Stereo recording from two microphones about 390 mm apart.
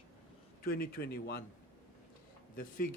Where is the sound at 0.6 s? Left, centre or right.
Left.